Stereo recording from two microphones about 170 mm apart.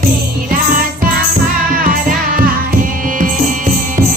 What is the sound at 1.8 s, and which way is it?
Music, 55° right (ahead or behind).